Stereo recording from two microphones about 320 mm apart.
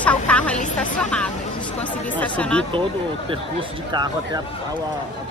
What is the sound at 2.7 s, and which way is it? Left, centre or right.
Speech, centre.